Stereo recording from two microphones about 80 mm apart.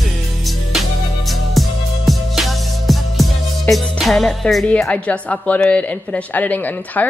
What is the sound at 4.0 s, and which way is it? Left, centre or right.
Music, centre.